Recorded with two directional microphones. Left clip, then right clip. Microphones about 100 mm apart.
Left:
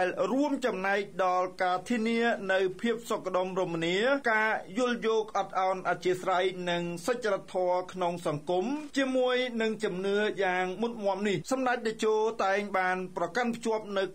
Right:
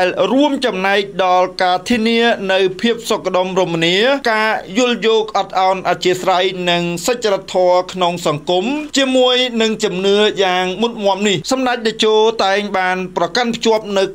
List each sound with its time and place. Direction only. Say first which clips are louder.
0.0 s a man's voice: right 15 dB; 30° right (ahead or behind)
4.7 s a man's voice: right 17 dB; 20° right (ahead or behind)